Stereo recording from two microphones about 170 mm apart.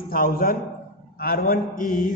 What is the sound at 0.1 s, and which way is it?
A man's voice, 60° left (ahead or behind).